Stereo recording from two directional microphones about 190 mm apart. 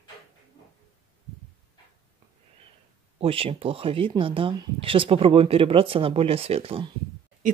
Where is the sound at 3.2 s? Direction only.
30° right (ahead or behind).